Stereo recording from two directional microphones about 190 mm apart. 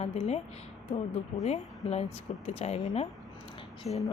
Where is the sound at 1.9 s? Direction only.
35° left (ahead or behind).